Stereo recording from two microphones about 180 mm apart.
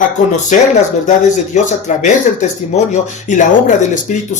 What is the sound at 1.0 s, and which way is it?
Speech, 45° left (ahead or behind).